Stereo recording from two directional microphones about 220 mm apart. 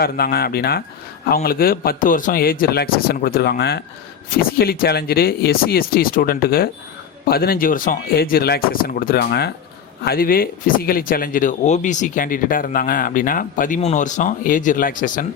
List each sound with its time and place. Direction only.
0.0 s a man's voice: 45° left (ahead or behind)